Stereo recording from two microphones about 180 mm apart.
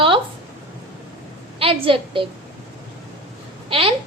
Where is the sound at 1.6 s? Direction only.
30° right (ahead or behind).